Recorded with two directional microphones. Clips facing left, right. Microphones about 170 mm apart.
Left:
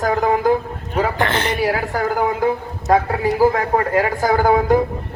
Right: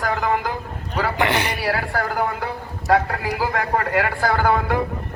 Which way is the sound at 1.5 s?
45° left (ahead or behind).